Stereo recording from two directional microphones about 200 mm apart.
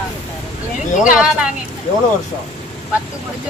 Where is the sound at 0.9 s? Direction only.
40° left (ahead or behind).